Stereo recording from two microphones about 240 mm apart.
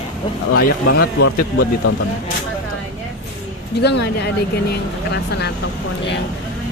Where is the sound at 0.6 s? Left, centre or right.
Left.